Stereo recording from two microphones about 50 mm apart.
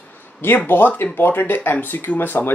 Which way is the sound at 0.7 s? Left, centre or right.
Left.